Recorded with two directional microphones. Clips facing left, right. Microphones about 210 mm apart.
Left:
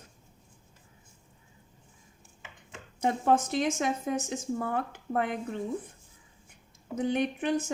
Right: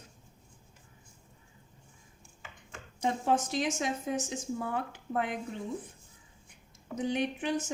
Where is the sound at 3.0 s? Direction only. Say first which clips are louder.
Left 3 dB; 55° left (ahead or behind).